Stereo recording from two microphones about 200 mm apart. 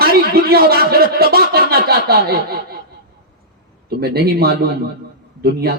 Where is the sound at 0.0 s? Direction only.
50° right (ahead or behind).